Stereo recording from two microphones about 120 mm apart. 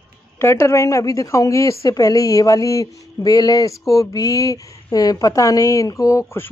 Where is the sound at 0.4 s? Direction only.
20° left (ahead or behind).